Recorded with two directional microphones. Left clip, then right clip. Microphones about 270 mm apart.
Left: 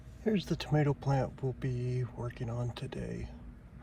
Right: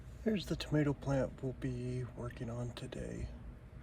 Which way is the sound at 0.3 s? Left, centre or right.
Centre.